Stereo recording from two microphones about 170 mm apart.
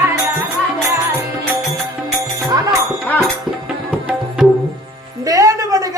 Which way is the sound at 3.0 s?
10° left (ahead or behind).